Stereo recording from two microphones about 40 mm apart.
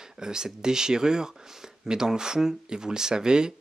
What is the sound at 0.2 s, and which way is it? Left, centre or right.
Speech, centre.